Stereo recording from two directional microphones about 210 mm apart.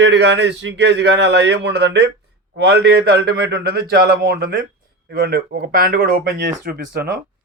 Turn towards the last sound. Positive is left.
turn(degrees=-45)  # may be behind; listen again after turning